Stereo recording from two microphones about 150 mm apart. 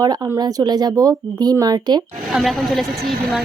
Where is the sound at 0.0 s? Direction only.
25° right (ahead or behind).